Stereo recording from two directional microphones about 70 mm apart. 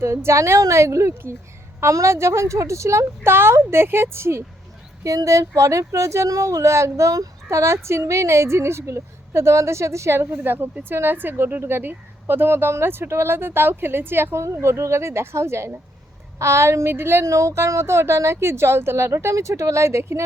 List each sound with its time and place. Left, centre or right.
0.0 s speech: right
5.0 s speech: right
17.2 s speech: right